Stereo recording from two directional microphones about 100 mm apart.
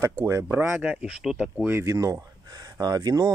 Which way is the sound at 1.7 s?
30° right (ahead or behind).